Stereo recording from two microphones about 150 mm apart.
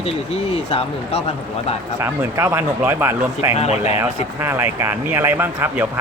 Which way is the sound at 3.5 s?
45° left (ahead or behind).